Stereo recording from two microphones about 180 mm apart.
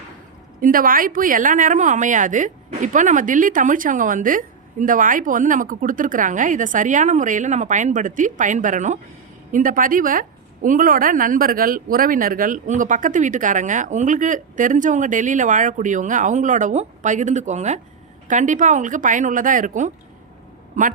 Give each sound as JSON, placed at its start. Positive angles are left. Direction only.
{"t": 0.6, "sound": "a woman's voice", "side_deg": -50}